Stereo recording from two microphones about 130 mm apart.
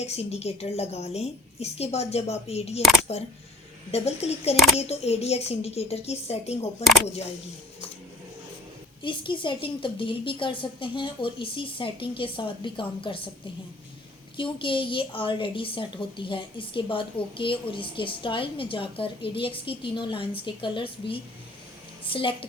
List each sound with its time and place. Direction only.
0.0 s a woman's voice: 55° left (ahead or behind)
9.0 s a woman's voice: 40° left (ahead or behind)
14.3 s a woman's voice: 40° left (ahead or behind)